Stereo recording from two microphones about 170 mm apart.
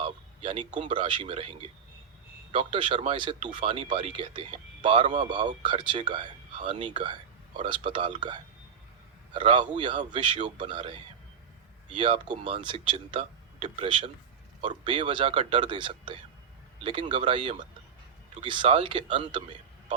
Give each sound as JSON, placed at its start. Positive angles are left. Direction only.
{"t": 0.0, "sound": "a man's voice", "side_deg": -35}